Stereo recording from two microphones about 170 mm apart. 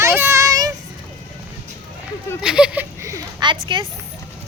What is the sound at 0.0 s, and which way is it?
Child singing, 15° right (ahead or behind).